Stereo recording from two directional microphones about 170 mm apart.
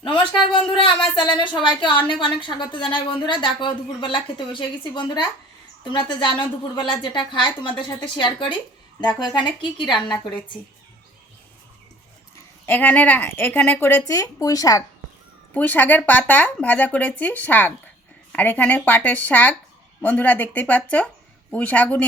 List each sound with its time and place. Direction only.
0.5 s a woman's voice: 30° left (ahead or behind)
12.6 s speech: 10° left (ahead or behind)
15.5 s speech: 10° left (ahead or behind)